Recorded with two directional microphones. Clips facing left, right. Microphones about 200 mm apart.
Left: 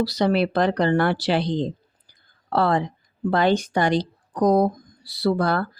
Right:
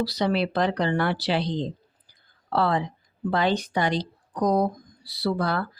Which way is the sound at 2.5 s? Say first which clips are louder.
Left 3 dB; 45° left (ahead or behind).